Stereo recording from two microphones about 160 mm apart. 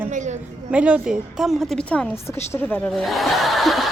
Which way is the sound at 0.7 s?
5° right (ahead or behind).